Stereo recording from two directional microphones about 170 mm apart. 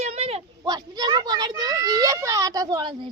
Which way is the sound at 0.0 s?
35° right (ahead or behind).